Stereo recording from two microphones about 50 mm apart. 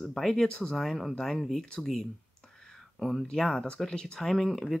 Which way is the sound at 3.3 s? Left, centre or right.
Centre.